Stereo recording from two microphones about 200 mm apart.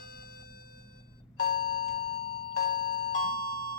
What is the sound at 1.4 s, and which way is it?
Doorbell, 45° left (ahead or behind).